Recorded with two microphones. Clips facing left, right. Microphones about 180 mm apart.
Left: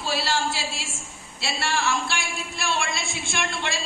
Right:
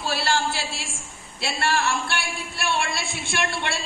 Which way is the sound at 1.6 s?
60° right (ahead or behind).